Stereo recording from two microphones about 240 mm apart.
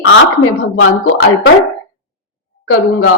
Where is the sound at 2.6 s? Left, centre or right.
Left.